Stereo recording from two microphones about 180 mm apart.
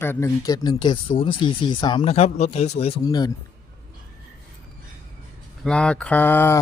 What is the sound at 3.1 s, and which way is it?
Speech, 20° left (ahead or behind).